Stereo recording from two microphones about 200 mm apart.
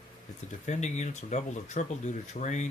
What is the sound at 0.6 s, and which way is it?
Speech, 35° left (ahead or behind).